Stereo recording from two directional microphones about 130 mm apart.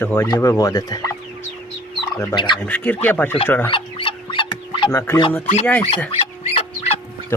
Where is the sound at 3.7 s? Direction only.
45° left (ahead or behind).